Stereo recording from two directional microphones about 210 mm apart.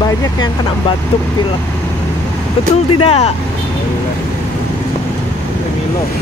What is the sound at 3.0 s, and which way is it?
Speech, 30° left (ahead or behind).